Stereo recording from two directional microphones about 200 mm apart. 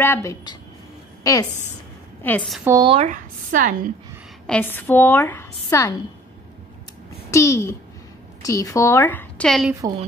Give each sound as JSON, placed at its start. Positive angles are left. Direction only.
{"t": 0.0, "sound": "a woman's voice", "side_deg": 15}
{"t": 2.2, "sound": "a woman's voice", "side_deg": 5}
{"t": 2.6, "sound": "speech", "side_deg": -15}
{"t": 2.9, "sound": "speech", "side_deg": -35}
{"t": 4.5, "sound": "a woman's voice", "side_deg": 10}
{"t": 7.2, "sound": "a child's voice", "side_deg": 15}